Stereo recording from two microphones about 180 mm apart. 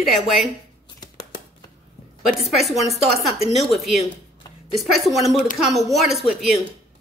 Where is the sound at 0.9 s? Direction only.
20° left (ahead or behind).